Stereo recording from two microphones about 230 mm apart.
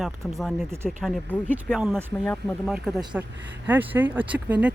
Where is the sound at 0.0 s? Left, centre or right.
Centre.